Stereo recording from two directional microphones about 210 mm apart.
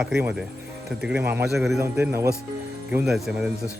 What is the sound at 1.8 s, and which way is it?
Speech, 10° right (ahead or behind).